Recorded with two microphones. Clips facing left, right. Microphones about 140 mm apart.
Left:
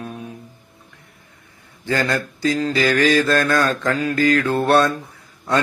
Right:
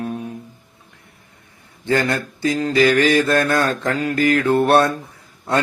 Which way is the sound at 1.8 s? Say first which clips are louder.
Right 2 dB; 25° right (ahead or behind).